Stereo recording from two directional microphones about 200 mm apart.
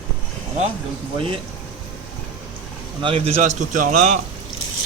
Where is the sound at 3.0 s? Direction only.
30° right (ahead or behind).